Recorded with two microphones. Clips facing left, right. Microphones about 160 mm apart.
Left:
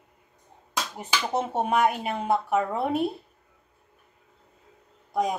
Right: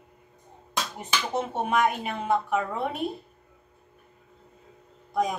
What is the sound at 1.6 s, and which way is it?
Speech, 35° left (ahead or behind).